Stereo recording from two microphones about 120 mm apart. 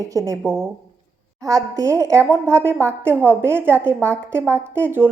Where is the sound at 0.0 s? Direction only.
30° right (ahead or behind).